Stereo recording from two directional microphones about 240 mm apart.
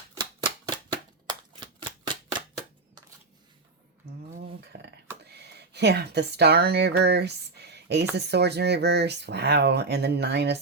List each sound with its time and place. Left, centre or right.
0.2 s typewriter: centre
1.3 s shuffling cards: centre
4.7 s a sound: right
5.3 s speech: right